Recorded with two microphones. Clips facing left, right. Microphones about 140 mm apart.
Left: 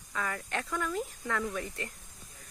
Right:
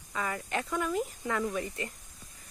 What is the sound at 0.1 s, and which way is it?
Speech, 5° right (ahead or behind).